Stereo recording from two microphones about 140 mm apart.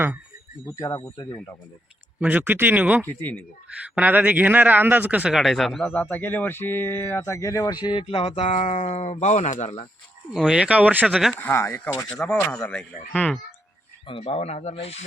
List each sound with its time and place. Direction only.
0.6 s speech: 20° left (ahead or behind)
2.2 s speech: 10° right (ahead or behind)
3.0 s speech: 15° left (ahead or behind)
3.8 s speech: 10° right (ahead or behind); by 9.9 s 50° left (ahead or behind)
10.3 s speech: 5° right (ahead or behind)
11.3 s speech: 15° left (ahead or behind)
14.1 s speech: 45° left (ahead or behind)